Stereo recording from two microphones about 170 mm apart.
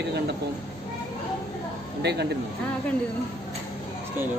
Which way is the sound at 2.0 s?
80° right.